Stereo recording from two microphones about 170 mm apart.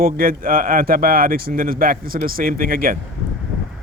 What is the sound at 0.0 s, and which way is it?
Speech, 55° right (ahead or behind).